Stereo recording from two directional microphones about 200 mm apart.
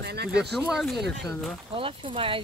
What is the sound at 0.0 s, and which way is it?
Speech, 55° right (ahead or behind).